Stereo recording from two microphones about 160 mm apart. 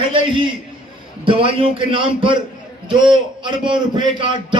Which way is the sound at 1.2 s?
35° right (ahead or behind).